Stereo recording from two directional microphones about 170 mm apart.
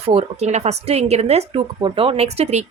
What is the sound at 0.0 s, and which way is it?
Speech, 35° right (ahead or behind).